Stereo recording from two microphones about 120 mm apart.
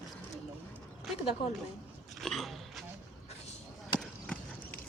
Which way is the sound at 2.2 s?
Centre (ahead or behind).